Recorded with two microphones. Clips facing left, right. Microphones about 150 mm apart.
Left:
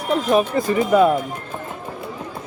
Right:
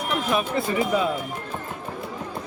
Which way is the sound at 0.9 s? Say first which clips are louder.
Left 13 dB; 60° left (ahead or behind).